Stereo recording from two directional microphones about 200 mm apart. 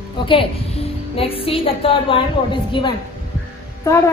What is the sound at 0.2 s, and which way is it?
A woman's voice, 25° left (ahead or behind).